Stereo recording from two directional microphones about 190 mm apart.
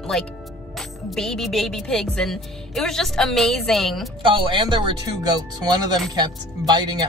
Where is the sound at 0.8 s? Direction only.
Centre (ahead or behind).